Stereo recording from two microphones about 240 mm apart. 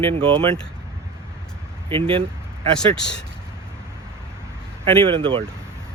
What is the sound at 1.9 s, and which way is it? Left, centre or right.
Speech, right.